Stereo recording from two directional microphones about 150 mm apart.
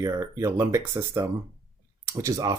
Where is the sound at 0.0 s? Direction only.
20° right (ahead or behind).